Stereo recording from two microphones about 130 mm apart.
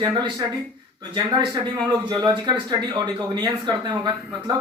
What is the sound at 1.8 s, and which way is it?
Speech, 30° right (ahead or behind).